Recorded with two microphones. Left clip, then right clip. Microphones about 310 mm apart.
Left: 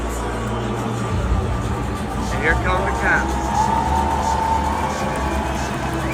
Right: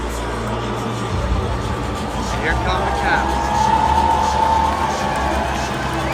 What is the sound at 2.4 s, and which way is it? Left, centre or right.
Speech, centre.